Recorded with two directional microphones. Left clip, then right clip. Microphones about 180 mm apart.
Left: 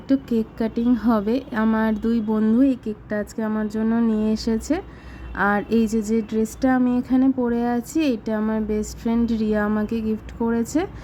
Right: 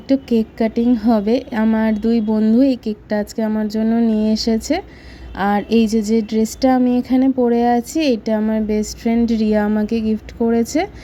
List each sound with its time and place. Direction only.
0.1 s a woman's voice: 15° right (ahead or behind)
5.4 s a sound: 15° right (ahead or behind)
7.4 s a woman's voice: 20° right (ahead or behind)